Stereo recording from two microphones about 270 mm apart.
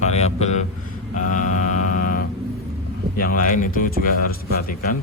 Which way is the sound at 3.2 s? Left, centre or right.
Left.